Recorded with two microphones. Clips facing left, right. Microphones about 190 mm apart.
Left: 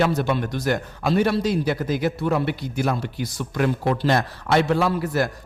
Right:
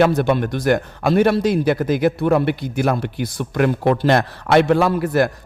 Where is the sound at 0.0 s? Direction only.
55° right (ahead or behind).